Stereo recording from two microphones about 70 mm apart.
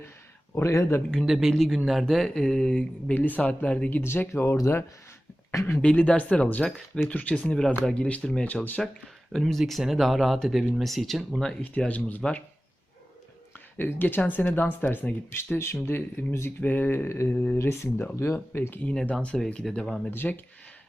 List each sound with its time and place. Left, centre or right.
0.5 s speech: left
1.3 s speech: centre
3.8 s speech: left
5.8 s speech: centre
11.9 s speech: left
13.7 s speech: left
17.1 s speech: left
17.6 s speech: left
19.1 s speech: centre
20.1 s speech: left